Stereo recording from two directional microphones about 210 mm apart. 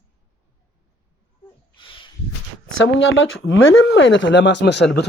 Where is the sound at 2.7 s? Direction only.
70° left (ahead or behind).